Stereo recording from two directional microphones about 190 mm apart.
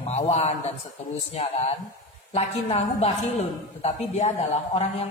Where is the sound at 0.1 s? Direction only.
35° left (ahead or behind).